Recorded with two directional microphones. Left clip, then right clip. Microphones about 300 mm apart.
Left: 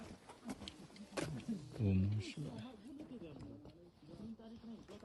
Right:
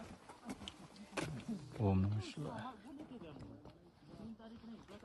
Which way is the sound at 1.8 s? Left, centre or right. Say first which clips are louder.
Right 3 dB; centre.